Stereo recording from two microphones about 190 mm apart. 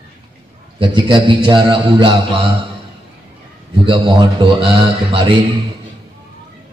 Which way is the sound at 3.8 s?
25° right (ahead or behind).